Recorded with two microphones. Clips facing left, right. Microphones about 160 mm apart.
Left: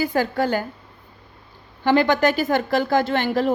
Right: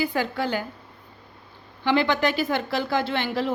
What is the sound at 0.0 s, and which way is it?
Speech, 45° left (ahead or behind).